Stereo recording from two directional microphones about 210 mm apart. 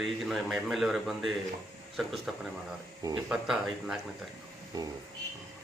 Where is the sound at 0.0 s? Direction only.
Centre (ahead or behind).